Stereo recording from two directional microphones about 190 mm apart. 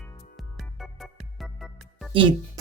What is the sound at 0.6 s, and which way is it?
Music, centre (ahead or behind).